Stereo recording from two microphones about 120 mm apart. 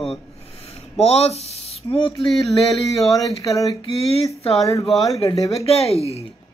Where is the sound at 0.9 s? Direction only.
60° left (ahead or behind).